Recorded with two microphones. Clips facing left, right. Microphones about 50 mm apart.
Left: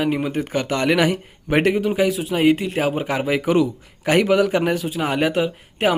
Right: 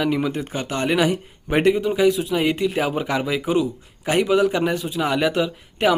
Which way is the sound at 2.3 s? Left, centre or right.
Left.